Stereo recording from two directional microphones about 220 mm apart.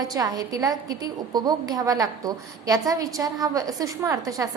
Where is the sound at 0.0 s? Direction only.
15° right (ahead or behind).